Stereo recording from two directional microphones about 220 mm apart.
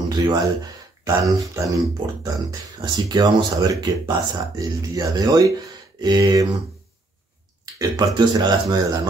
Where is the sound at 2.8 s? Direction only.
20° right (ahead or behind).